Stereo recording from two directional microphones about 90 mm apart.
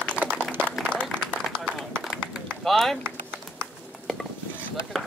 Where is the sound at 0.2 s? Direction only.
20° right (ahead or behind).